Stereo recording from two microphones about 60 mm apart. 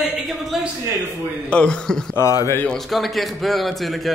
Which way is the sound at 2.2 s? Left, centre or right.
Left.